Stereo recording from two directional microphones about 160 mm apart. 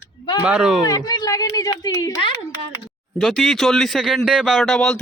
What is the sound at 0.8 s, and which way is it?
Speech, 25° left (ahead or behind).